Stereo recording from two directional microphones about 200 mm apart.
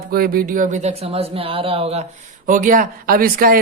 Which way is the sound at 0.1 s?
45° right (ahead or behind).